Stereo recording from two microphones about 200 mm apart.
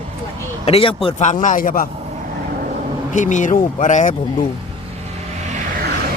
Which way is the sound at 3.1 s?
40° left (ahead or behind).